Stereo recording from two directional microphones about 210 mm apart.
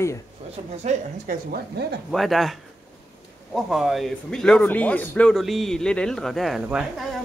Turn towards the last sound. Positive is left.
turn(degrees=-5)  # may be behind; listen again after turning